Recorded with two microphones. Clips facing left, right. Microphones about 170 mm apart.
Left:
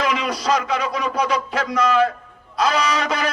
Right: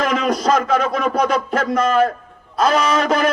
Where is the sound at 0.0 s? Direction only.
50° right (ahead or behind).